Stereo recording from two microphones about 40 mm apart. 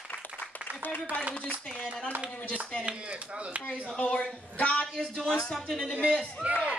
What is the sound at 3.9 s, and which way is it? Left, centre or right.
Speech, left.